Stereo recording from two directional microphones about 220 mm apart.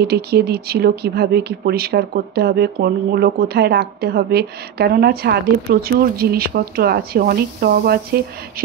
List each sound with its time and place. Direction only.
0.0 s speech: 45° right (ahead or behind)